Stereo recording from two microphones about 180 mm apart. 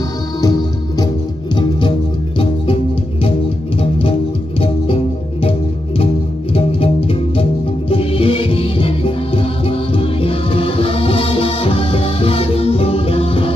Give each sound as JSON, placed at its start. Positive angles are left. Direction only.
{"t": 0.4, "sound": "music", "side_deg": 20}
{"t": 4.6, "sound": "music", "side_deg": 30}
{"t": 6.5, "sound": "music", "side_deg": 35}